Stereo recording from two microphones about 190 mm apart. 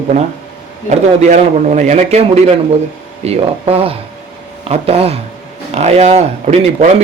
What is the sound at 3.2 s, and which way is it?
Speech, 30° right (ahead or behind).